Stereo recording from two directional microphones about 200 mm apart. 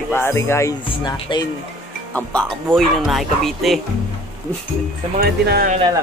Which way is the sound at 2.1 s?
5° left (ahead or behind).